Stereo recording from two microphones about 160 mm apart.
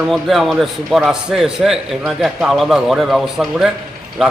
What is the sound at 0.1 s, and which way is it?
Speech, centre (ahead or behind).